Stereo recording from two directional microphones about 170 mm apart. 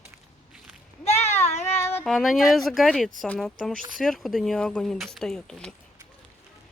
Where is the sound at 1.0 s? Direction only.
35° left (ahead or behind).